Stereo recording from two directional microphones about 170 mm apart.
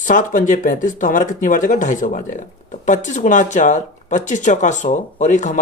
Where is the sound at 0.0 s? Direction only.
50° left (ahead or behind).